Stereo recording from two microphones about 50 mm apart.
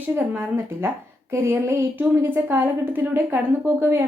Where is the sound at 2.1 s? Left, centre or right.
Right.